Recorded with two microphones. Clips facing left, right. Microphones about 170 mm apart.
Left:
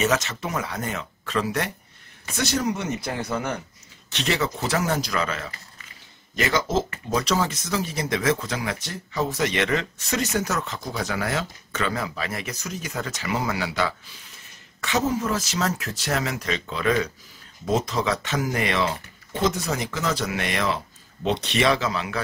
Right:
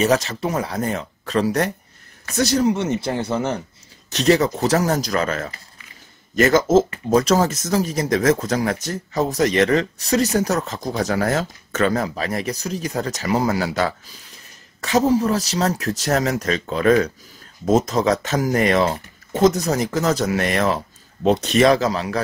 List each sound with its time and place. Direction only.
0.0 s speech: 35° right (ahead or behind)